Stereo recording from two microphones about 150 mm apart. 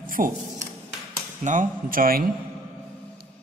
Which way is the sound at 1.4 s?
60° right (ahead or behind).